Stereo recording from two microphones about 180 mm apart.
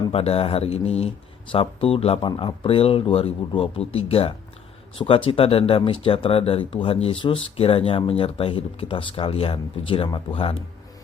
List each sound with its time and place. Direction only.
0.1 s speech: 35° left (ahead or behind)